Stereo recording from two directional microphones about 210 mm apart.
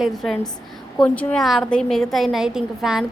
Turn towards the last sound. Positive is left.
turn(degrees=-5)  # may be behind; listen again after turning